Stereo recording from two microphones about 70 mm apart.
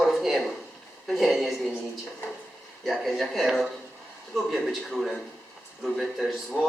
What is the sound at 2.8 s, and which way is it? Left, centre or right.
A man's voice, centre.